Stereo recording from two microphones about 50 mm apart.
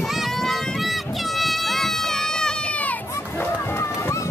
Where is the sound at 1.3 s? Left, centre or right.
Centre.